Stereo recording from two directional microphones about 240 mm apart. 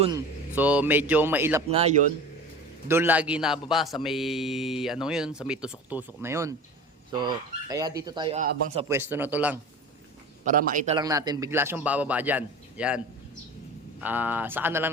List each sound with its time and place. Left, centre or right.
0.5 s a man's voice: centre
1.7 s speech: right
2.8 s a man's voice: centre
8.9 s a man's voice: centre
10.4 s a man's voice: right
10.9 s a man's voice: centre
14.0 s a man's voice: centre